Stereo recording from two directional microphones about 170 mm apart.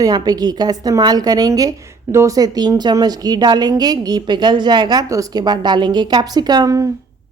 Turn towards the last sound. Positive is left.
turn(degrees=-20)  # may be behind; listen again after turning